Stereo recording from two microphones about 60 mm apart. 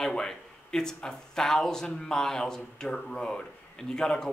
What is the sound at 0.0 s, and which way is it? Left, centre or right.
A man's voice, centre.